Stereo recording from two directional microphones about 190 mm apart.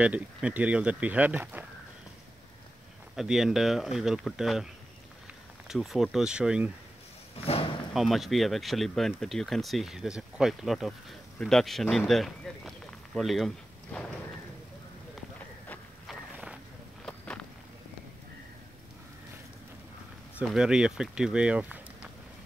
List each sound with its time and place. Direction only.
0.0 s speech: 5° right (ahead or behind)
3.2 s speech: centre (ahead or behind)
5.7 s speech: centre (ahead or behind)
7.3 s a sound: 30° left (ahead or behind)
7.9 s speech: centre (ahead or behind)
15.7 s walk: centre (ahead or behind)
20.3 s speech: 5° right (ahead or behind)